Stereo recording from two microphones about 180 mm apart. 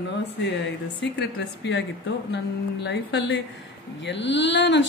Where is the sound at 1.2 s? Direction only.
75° left (ahead or behind).